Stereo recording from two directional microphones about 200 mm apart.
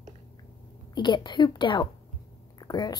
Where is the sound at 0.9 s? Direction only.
20° left (ahead or behind).